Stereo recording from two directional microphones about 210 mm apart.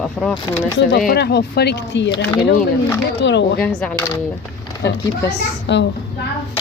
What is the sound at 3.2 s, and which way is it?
Speech, 55° left (ahead or behind).